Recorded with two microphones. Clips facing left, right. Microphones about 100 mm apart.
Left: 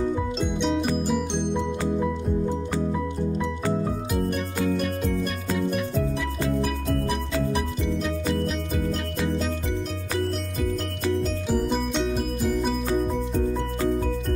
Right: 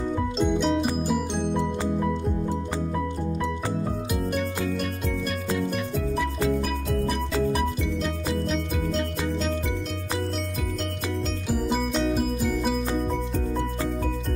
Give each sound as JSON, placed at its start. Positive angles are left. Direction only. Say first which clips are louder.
{"t": 0.4, "sound": "music", "louder": "right 5 dB", "side_deg": 0}
{"t": 11.5, "sound": "music", "louder": "even", "side_deg": 0}